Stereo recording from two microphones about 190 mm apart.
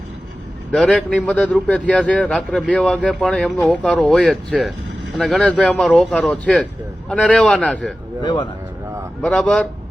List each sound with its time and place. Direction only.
0.7 s a man's voice: 5° left (ahead or behind)
8.2 s speech: 25° left (ahead or behind)
9.2 s a man's voice: 5° left (ahead or behind)